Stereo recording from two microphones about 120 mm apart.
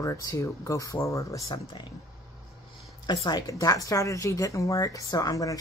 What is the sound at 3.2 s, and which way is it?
Speech, 30° left (ahead or behind).